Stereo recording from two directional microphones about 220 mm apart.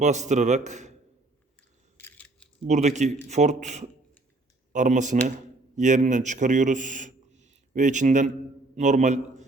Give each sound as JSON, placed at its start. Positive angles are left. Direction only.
{"t": 0.0, "sound": "a man's voice", "side_deg": -30}
{"t": 2.0, "sound": "crushing", "side_deg": 5}
{"t": 2.6, "sound": "a man's voice", "side_deg": -30}